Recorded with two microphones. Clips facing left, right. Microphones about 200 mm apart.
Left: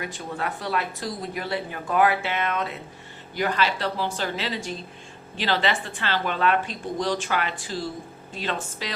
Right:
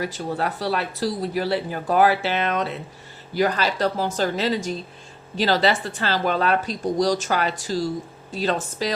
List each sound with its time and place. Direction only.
0.0 s speech: 35° right (ahead or behind)